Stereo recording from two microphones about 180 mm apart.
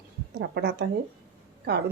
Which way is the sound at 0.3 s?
65° right (ahead or behind).